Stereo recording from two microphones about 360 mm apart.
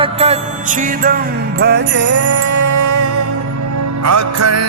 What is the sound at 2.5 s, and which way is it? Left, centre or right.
Music, right.